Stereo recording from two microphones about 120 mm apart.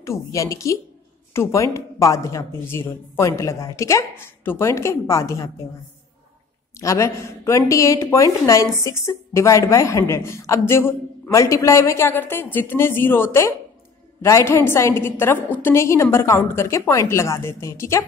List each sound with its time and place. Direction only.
0.0 s speech: 25° left (ahead or behind)
6.8 s speech: 25° left (ahead or behind)